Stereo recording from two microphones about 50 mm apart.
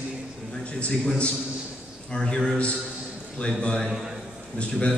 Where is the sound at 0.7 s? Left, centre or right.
Left.